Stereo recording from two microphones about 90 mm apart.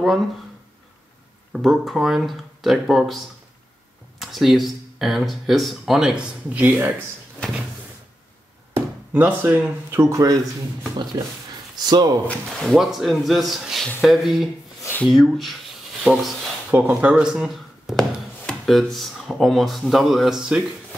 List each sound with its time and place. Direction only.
0.0 s speech: centre (ahead or behind)
1.5 s speech: centre (ahead or behind)
4.2 s speech: centre (ahead or behind); by 6.9 s 20° right (ahead or behind)
9.1 s speech: 20° right (ahead or behind); by 10.3 s 35° right (ahead or behind)
11.7 s speech: 50° right (ahead or behind)
12.4 s speech: centre (ahead or behind)
16.7 s speech: 20° right (ahead or behind)
17.3 s speech: 5° right (ahead or behind)